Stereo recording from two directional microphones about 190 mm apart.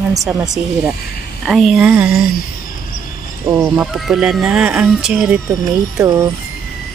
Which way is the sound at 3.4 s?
15° right (ahead or behind).